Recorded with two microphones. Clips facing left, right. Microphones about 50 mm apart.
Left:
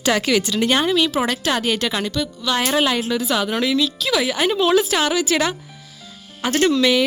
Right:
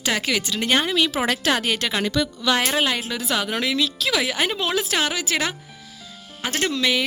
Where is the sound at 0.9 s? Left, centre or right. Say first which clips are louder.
Left 3 dB; right.